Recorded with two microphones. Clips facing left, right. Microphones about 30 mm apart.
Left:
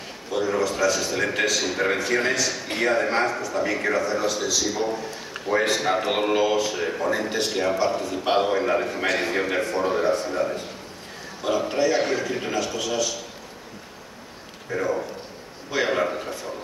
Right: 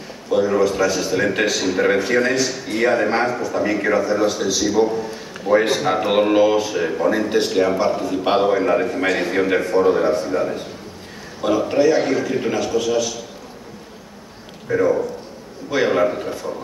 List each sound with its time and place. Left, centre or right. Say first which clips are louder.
0.3 s a man's voice: right 7 dB; centre
14.7 s a man's voice: right 8 dB; centre